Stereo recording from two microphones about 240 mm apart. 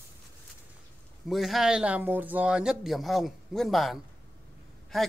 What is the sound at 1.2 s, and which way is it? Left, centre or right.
A man's voice, centre.